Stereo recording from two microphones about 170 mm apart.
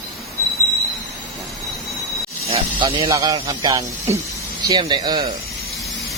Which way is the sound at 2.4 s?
30° right (ahead or behind).